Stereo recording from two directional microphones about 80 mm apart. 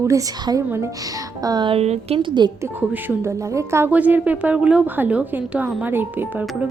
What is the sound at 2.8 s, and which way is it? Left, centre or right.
Speech, right.